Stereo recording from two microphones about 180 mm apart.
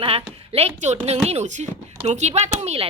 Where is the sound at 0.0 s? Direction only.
35° right (ahead or behind).